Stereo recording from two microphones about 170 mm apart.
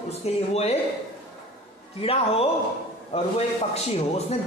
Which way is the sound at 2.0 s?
35° left (ahead or behind).